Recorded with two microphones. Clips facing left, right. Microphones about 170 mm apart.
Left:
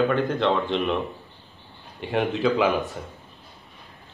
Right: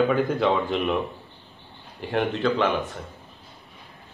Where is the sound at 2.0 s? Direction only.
Centre (ahead or behind).